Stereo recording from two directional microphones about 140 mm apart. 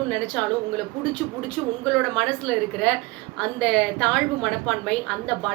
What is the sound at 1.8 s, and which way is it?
A woman's voice, 5° left (ahead or behind).